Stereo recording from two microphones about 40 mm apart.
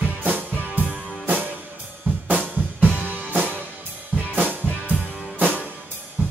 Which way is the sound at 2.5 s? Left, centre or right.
Right.